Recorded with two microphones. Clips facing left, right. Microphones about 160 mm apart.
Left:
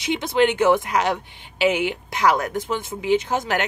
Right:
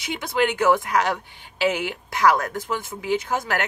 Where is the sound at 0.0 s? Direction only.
20° left (ahead or behind).